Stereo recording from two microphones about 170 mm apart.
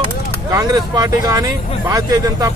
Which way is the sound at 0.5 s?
20° right (ahead or behind).